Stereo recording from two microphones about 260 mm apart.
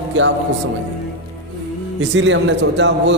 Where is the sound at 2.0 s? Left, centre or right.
Right.